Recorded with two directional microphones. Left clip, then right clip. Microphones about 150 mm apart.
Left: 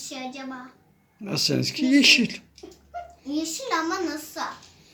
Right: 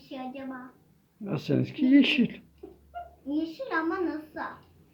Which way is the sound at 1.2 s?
20° left (ahead or behind).